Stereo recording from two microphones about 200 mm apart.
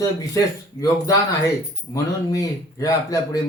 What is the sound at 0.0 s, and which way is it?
Speech, 15° left (ahead or behind).